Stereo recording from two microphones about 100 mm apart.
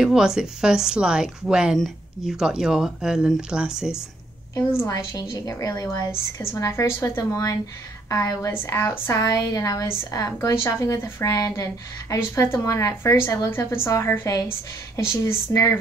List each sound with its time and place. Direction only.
0.0 s a woman's voice: 5° right (ahead or behind)
4.6 s a woman's voice: 35° left (ahead or behind)